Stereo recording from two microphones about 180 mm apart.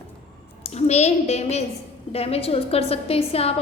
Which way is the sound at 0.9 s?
35° left (ahead or behind).